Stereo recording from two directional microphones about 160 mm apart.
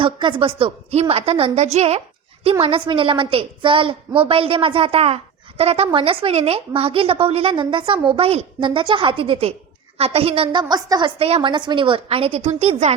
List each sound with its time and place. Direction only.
0.0 s a woman's voice: 30° right (ahead or behind)
11.2 s a woman's voice: 40° right (ahead or behind)